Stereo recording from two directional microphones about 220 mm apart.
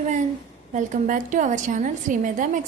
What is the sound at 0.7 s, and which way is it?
A woman's voice, 35° right (ahead or behind).